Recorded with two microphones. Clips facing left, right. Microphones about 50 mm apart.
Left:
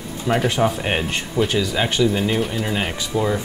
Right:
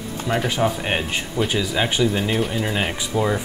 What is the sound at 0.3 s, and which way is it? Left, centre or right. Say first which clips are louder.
Speech: left 2 dB; centre.